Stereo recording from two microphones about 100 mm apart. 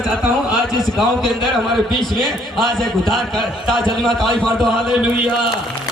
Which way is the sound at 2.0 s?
Centre (ahead or behind).